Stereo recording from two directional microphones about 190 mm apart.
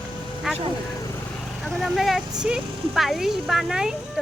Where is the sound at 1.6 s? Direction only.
Centre (ahead or behind).